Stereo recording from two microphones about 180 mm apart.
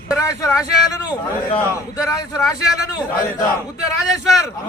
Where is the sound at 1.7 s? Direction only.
20° left (ahead or behind).